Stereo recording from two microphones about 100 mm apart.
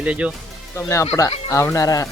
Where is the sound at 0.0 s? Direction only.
15° right (ahead or behind).